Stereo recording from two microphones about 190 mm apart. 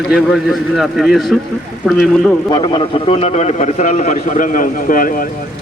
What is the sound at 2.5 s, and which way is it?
A man's voice, 25° left (ahead or behind).